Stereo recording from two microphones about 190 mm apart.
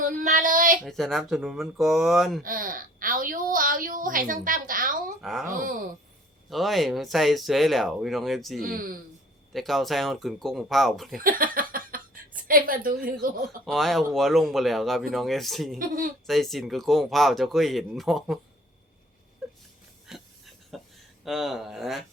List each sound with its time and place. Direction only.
0.0 s female singing: 40° right (ahead or behind)
0.9 s speech: centre (ahead or behind)
2.4 s a woman's voice: 45° right (ahead or behind)
5.2 s speech: centre (ahead or behind)
5.5 s a woman's voice: 45° right (ahead or behind)
6.5 s speech: centre (ahead or behind)
8.6 s a woman's voice: 50° right (ahead or behind)
9.5 s speech: centre (ahead or behind)
11.2 s a sound: 50° right (ahead or behind)
12.5 s a woman's voice: 50° right (ahead or behind)
13.7 s speech: centre (ahead or behind)
19.4 s whimper: centre (ahead or behind)
20.1 s a sound: centre (ahead or behind)
21.2 s speech: centre (ahead or behind)